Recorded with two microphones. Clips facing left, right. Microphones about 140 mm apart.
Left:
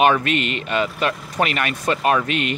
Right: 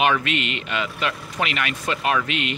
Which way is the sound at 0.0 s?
45° left (ahead or behind).